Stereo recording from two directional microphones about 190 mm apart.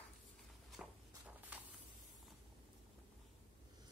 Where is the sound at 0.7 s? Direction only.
5° right (ahead or behind).